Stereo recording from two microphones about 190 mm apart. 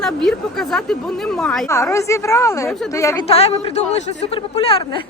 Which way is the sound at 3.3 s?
30° left (ahead or behind).